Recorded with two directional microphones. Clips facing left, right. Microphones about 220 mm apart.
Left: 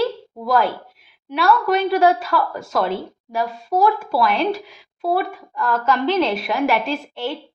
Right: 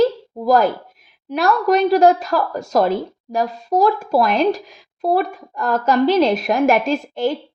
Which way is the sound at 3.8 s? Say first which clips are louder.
Right 2 dB; 40° right (ahead or behind).